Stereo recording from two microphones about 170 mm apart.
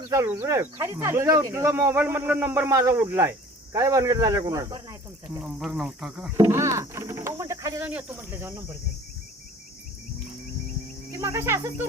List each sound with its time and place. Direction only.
0.1 s speech: 20° right (ahead or behind)
5.4 s speech: centre (ahead or behind)
6.3 s speech: 15° right (ahead or behind)
11.2 s speech: 15° right (ahead or behind)